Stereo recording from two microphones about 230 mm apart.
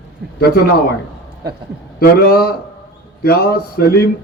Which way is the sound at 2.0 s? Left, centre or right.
Left.